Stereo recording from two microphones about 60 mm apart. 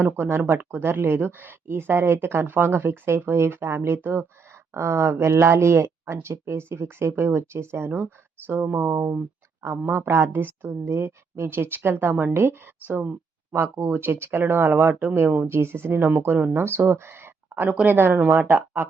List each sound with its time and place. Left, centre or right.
0.0 s speech: right
4.7 s speech: right
17.5 s speech: right